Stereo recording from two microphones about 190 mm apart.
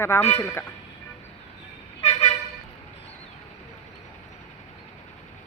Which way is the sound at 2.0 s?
30° left (ahead or behind).